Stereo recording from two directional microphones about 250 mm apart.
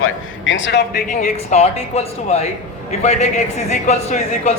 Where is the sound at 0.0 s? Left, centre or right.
Left.